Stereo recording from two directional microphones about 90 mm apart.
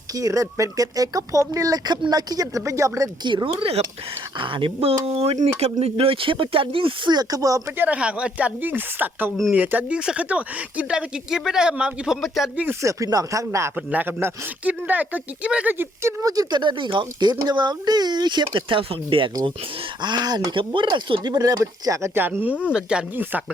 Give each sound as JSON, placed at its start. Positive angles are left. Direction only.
{"t": 0.1, "sound": "speech", "side_deg": -40}
{"t": 2.6, "sound": "speech", "side_deg": -35}
{"t": 3.2, "sound": "speech", "side_deg": -70}
{"t": 4.4, "sound": "speech", "side_deg": -65}
{"t": 7.1, "sound": "speech", "side_deg": -45}
{"t": 7.8, "sound": "speech", "side_deg": -15}
{"t": 12.8, "sound": "speech", "side_deg": -35}
{"t": 13.7, "sound": "speech", "side_deg": -20}
{"t": 16.2, "sound": "speech", "side_deg": -45}
{"t": 20.0, "sound": "speech", "side_deg": -55}
{"t": 22.6, "sound": "speech", "side_deg": -10}